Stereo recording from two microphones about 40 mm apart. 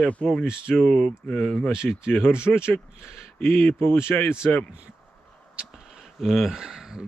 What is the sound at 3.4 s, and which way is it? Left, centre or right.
Speech, left.